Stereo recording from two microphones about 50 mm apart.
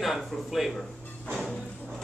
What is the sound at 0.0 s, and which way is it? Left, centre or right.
Speech, centre.